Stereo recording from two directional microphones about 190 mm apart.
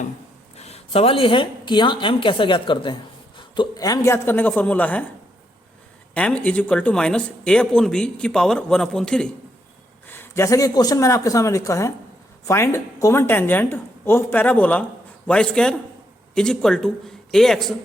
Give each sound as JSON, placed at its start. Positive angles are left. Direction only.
{"t": 0.5, "sound": "a woman's voice", "side_deg": 35}
{"t": 6.1, "sound": "a woman's voice", "side_deg": 5}